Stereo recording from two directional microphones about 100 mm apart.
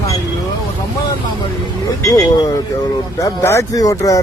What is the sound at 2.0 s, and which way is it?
Speech, 35° left (ahead or behind).